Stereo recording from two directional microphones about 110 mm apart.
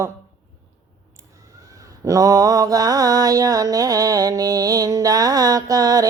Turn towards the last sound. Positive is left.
turn(degrees=-35)  # may be behind; listen again after turning